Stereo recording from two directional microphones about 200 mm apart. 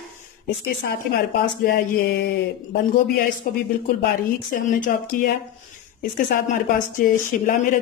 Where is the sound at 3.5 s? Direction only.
45° left (ahead or behind).